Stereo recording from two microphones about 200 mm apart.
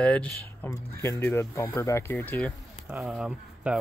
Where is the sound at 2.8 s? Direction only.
5° right (ahead or behind).